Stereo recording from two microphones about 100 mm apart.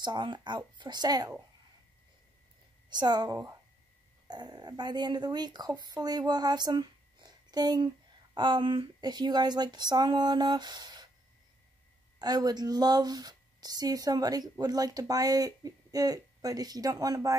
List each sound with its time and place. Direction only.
0.0 s speech: 50° right (ahead or behind)
2.9 s speech: 45° right (ahead or behind)
12.2 s a woman's voice: 40° right (ahead or behind)